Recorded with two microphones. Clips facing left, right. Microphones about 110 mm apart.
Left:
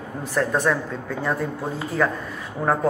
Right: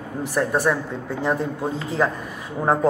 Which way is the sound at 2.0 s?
20° right (ahead or behind).